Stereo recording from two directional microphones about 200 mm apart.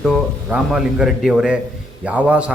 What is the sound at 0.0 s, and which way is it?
A man's voice, centre (ahead or behind).